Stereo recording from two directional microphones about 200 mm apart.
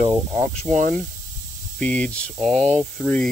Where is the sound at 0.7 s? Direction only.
40° right (ahead or behind).